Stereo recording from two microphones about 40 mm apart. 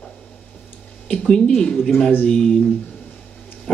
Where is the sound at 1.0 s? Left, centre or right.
Centre.